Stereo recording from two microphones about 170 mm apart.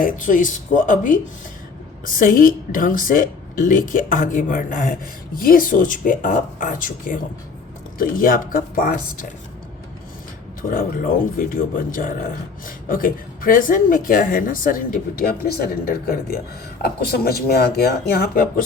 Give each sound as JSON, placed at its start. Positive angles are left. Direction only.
{"t": 0.0, "sound": "a woman's voice", "side_deg": 50}
{"t": 10.6, "sound": "a woman's voice", "side_deg": 55}